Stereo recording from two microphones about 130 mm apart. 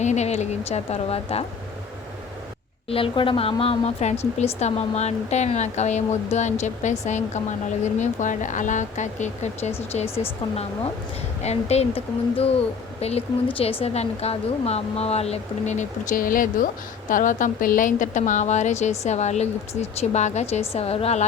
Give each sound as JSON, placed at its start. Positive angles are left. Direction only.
{"t": 0.0, "sound": "a woman's voice", "side_deg": 60}
{"t": 2.9, "sound": "a woman's voice", "side_deg": 45}
{"t": 7.9, "sound": "speech", "side_deg": 70}
{"t": 11.4, "sound": "a woman's voice", "side_deg": 55}